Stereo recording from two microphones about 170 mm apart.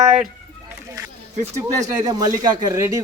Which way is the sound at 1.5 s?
20° right (ahead or behind).